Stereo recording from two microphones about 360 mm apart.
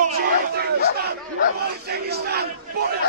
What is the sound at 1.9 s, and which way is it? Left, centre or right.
Battle cry, right.